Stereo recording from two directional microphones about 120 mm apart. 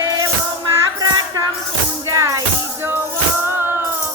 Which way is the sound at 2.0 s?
25° right (ahead or behind).